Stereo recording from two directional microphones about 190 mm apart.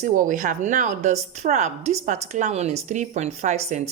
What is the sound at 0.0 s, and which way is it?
Speech, 40° right (ahead or behind).